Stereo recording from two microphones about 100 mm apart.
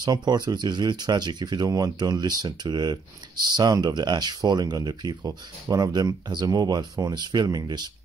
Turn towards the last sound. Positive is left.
turn(degrees=-45)  # may be behind; listen again after turning